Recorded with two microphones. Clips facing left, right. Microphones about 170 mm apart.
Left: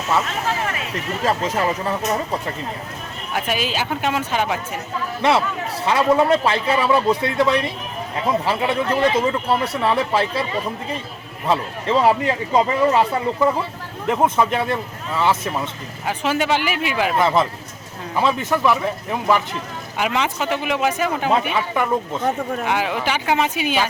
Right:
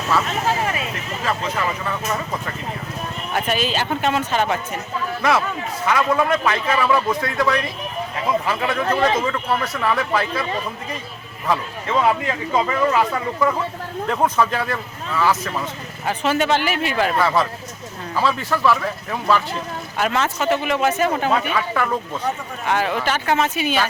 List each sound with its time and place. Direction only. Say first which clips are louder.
0.1 s speech: even; 20° left (ahead or behind)
1.2 s speech: left 3 dB; 35° left (ahead or behind)
3.3 s a man's voice: right 1 dB; 10° left (ahead or behind)
5.8 s speech: left 3 dB; 30° left (ahead or behind)
11.4 s a man's voice: left 2 dB; 30° left (ahead or behind); by 23.9 s 15° left (ahead or behind)